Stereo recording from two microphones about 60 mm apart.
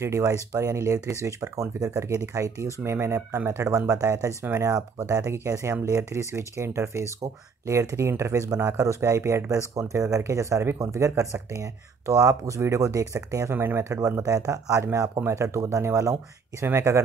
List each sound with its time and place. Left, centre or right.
0.0 s speech: right
3.9 s speech: right
14.2 s speech: right